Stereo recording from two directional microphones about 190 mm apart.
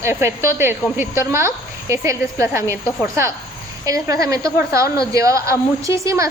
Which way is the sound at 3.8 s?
20° right (ahead or behind).